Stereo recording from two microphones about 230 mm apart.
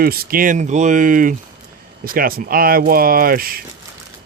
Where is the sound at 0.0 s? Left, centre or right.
Right.